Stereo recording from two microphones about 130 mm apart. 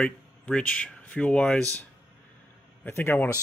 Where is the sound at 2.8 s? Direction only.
15° left (ahead or behind).